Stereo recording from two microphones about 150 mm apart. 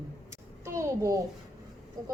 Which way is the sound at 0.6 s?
20° right (ahead or behind).